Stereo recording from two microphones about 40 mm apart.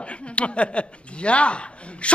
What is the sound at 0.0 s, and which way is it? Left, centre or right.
A man's voice, left.